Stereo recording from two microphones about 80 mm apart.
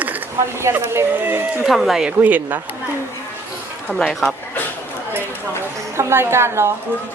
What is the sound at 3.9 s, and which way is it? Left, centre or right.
Speech, centre.